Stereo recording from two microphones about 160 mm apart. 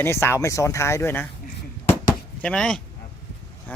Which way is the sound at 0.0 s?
15° left (ahead or behind).